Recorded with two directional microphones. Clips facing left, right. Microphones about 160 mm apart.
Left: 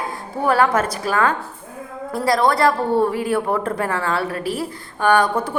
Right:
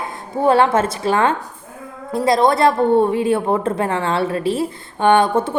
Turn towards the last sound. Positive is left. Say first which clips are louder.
# right 3 dB
turn(degrees=-25)  # may be behind; listen again after turning